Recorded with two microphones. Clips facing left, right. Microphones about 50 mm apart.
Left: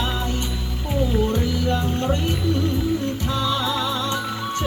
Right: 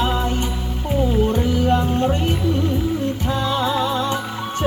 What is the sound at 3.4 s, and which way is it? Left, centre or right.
Music, right.